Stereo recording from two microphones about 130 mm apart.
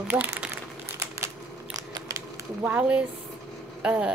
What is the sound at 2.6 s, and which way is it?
Speech, 10° right (ahead or behind).